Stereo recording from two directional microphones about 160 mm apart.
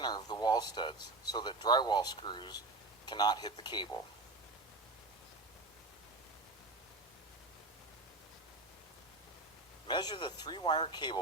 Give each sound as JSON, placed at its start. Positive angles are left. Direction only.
{"t": 0.0, "sound": "speech", "side_deg": 25}
{"t": 9.8, "sound": "speech", "side_deg": 25}